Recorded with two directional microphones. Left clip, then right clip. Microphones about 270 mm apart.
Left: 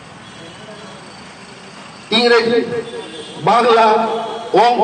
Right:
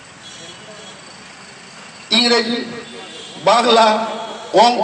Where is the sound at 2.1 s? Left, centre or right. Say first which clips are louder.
Left 2 dB; right.